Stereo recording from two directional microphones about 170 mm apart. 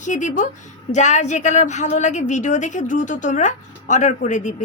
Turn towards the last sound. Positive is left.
turn(degrees=45)  # may be behind; listen again after turning